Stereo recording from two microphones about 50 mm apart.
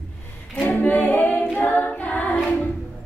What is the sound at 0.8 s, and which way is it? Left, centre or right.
A capella, left.